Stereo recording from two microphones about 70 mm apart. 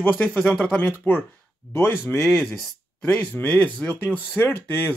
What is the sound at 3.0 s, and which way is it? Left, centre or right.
Speech, left.